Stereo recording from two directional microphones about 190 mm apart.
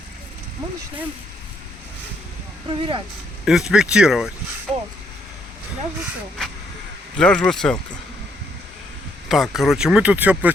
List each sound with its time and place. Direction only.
2.6 s speech: 25° right (ahead or behind)
3.4 s speech: 5° right (ahead or behind)
7.2 s speech: 5° left (ahead or behind)
9.3 s speech: centre (ahead or behind)